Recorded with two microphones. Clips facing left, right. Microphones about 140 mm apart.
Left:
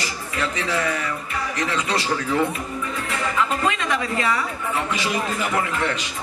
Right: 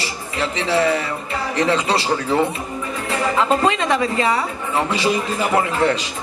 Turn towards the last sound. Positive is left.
turn(degrees=-35)  # may be behind; listen again after turning